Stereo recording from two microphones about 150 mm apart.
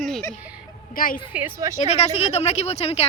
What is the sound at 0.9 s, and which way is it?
Speech, 70° left (ahead or behind).